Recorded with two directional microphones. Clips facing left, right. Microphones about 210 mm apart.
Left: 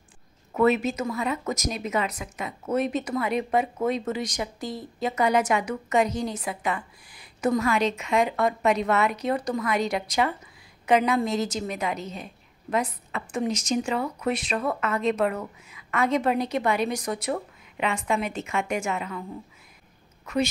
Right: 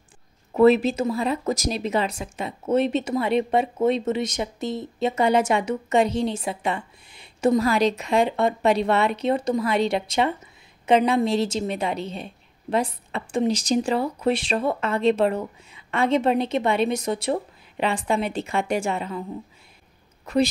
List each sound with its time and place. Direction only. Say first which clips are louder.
0.5 s speech: right 5 dB; 30° right (ahead or behind)